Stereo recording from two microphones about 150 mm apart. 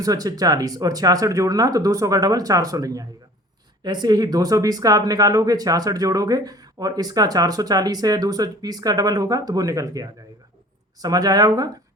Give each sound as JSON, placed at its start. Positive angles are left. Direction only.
{"t": 0.0, "sound": "speech", "side_deg": -25}